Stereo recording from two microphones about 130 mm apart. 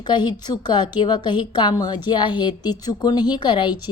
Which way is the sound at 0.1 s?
35° left (ahead or behind).